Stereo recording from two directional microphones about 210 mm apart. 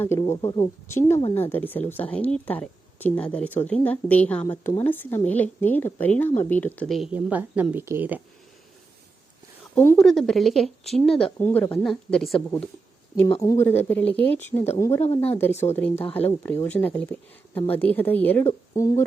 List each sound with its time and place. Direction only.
0.0 s a woman's voice: 10° left (ahead or behind)
4.4 s a woman's voice: 20° left (ahead or behind)
4.8 s a woman's voice: 10° left (ahead or behind); by 8.2 s 10° right (ahead or behind)
9.7 s a woman's voice: 10° left (ahead or behind)
13.2 s a woman's voice: 15° left (ahead or behind)